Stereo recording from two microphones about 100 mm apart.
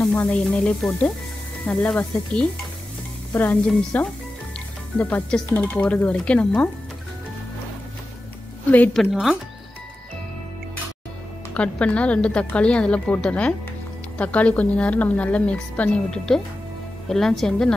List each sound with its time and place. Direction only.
0.1 s a woman's voice: 15° left (ahead or behind)
8.6 s a woman's voice: 15° left (ahead or behind)
9.1 s speech: 5° right (ahead or behind)
11.5 s a woman's voice: 10° left (ahead or behind)